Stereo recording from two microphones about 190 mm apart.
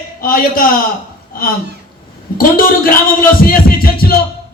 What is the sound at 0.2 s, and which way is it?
Speech, 45° left (ahead or behind).